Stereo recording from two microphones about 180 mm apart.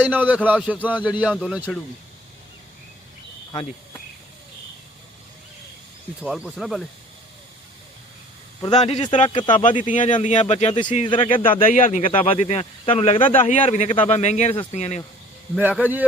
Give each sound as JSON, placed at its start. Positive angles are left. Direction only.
{"t": 0.0, "sound": "a man's voice", "side_deg": -10}
{"t": 6.2, "sound": "speech", "side_deg": -5}
{"t": 8.7, "sound": "speech", "side_deg": 35}
{"t": 9.3, "sound": "speech", "side_deg": 25}
{"t": 9.8, "sound": "speech", "side_deg": 45}
{"t": 11.7, "sound": "speech", "side_deg": 45}
{"t": 15.5, "sound": "a man's voice", "side_deg": -10}